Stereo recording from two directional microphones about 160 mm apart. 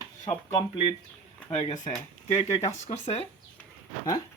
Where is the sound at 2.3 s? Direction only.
40° left (ahead or behind).